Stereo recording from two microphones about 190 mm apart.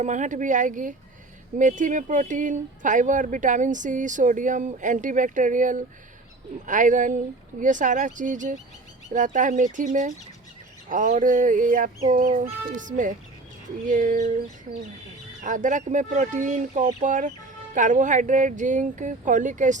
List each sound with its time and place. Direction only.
0.0 s speech: 40° right (ahead or behind)
6.7 s fowl: 40° right (ahead or behind)
7.6 s speech: 40° right (ahead or behind)
10.8 s fowl: 45° right (ahead or behind)
15.4 s speech: 40° right (ahead or behind)